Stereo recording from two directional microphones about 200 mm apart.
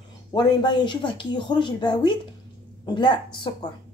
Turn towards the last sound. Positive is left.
turn(degrees=25)  # may be behind; listen again after turning